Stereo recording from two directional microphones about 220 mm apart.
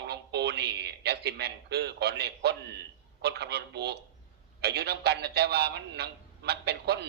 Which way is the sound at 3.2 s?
50° right (ahead or behind).